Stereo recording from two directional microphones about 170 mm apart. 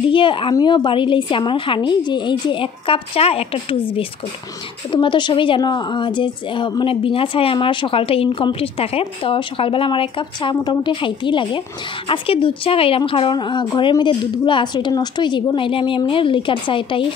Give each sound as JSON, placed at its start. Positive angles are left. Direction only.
{"t": 0.1, "sound": "a woman's voice", "side_deg": 30}